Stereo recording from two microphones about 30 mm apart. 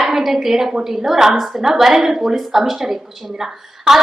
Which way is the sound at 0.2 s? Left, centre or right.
Centre.